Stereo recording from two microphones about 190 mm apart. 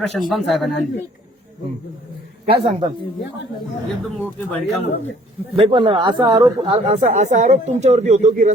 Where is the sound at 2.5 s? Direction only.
25° right (ahead or behind).